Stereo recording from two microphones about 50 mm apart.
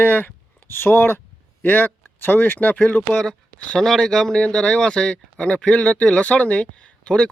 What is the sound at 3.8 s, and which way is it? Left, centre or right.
Speech, centre.